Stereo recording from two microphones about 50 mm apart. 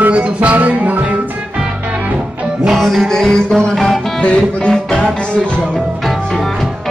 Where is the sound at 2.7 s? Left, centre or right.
Centre.